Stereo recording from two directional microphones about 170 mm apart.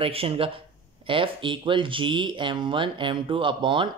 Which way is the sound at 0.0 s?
35° right (ahead or behind).